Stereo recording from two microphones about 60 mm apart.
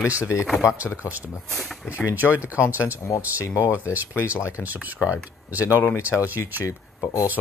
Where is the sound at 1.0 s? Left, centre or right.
Right.